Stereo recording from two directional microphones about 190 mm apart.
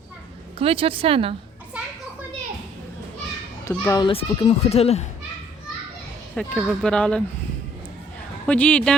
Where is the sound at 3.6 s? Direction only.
15° left (ahead or behind); by 5.1 s 35° left (ahead or behind).